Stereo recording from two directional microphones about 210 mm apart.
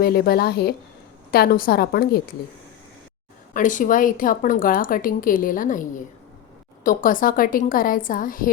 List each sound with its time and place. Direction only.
0.0 s a woman's voice: 45° left (ahead or behind)
3.5 s a woman's voice: 40° left (ahead or behind)